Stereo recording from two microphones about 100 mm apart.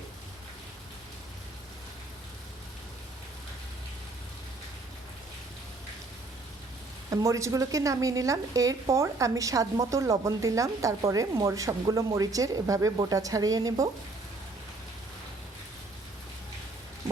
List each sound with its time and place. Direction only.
7.1 s a woman's voice: 30° right (ahead or behind)